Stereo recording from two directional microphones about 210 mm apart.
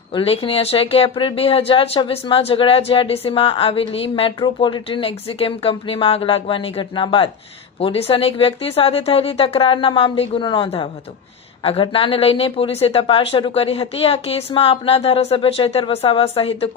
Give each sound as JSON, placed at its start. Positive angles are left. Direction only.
{"t": 0.1, "sound": "speech", "side_deg": 25}